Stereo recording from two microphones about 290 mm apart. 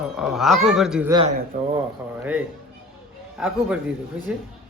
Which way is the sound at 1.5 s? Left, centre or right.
Right.